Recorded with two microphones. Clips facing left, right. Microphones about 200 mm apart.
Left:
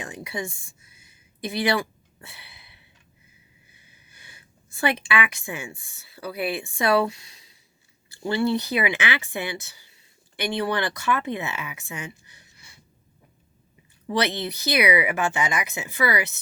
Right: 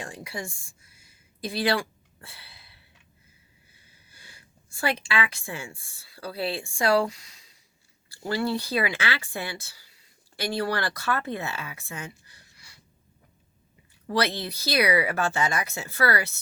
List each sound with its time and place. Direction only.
0.0 s a woman's voice: 20° left (ahead or behind)
1.0 s a sound: 20° left (ahead or behind)
3.7 s speech: 20° left (ahead or behind)
14.1 s speech: 20° left (ahead or behind)